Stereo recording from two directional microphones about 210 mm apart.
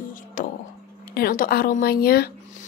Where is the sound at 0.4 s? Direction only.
40° left (ahead or behind).